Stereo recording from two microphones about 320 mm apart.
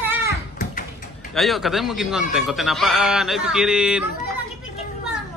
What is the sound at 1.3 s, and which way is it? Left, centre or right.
Speech, centre.